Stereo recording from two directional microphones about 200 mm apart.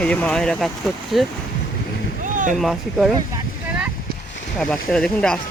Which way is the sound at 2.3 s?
40° right (ahead or behind).